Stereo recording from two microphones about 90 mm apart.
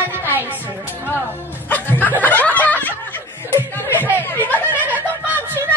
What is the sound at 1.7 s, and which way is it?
Snicker, 20° left (ahead or behind).